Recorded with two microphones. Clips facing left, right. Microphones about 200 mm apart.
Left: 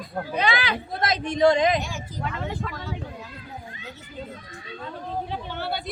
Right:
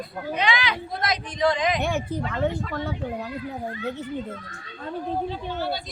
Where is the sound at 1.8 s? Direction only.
60° right (ahead or behind).